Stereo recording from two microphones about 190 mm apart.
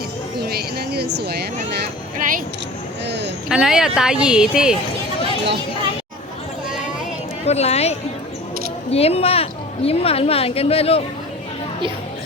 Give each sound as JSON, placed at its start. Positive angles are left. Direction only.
{"t": 0.4, "sound": "speech", "side_deg": -55}
{"t": 3.1, "sound": "speech", "side_deg": -65}
{"t": 3.5, "sound": "speech", "side_deg": -5}
{"t": 7.4, "sound": "a woman's voice", "side_deg": 35}